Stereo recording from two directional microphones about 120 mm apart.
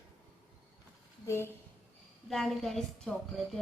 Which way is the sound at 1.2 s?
20° left (ahead or behind).